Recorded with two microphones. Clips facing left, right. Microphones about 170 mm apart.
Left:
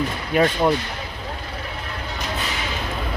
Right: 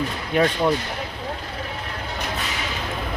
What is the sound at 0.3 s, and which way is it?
Speech, 5° left (ahead or behind).